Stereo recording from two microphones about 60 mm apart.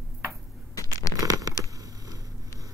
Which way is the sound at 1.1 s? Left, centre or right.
Right.